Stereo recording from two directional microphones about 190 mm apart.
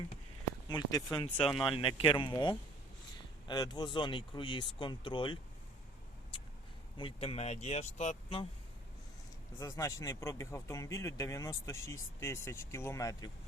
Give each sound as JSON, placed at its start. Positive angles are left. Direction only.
{"t": 0.7, "sound": "speech", "side_deg": 20}
{"t": 6.9, "sound": "speech", "side_deg": 30}
{"t": 9.6, "sound": "speech", "side_deg": 15}